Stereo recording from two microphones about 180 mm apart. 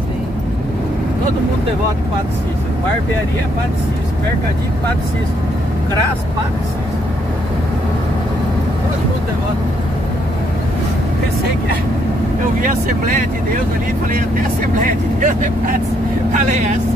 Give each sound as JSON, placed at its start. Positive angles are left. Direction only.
{"t": 14.8, "sound": "speech", "side_deg": -45}